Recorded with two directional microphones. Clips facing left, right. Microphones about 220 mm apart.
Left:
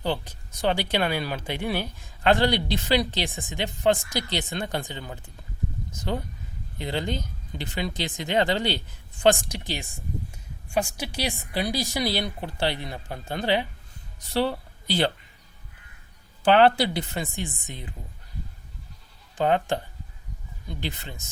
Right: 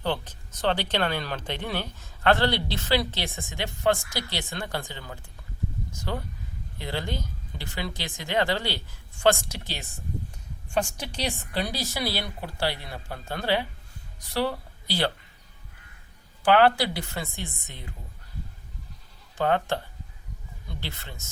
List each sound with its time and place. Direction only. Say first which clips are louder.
0.0 s speech: left 1 dB; 10° left (ahead or behind)
16.4 s speech: left 2 dB; 25° left (ahead or behind)
19.4 s speech: left 2 dB; 15° left (ahead or behind)